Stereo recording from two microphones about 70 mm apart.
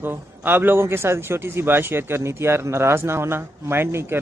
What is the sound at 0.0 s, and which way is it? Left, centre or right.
A man's voice, right.